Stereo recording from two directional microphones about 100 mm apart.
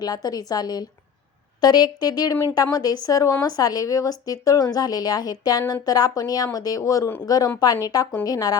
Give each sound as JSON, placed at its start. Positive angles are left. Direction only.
{"t": 0.0, "sound": "speech", "side_deg": 40}